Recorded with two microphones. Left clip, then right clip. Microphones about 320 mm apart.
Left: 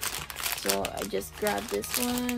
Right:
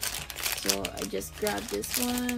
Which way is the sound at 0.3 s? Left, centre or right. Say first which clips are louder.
Even; centre.